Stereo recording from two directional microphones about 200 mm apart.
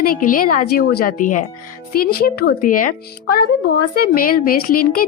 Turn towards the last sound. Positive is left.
turn(degrees=45)  # may be behind; listen again after turning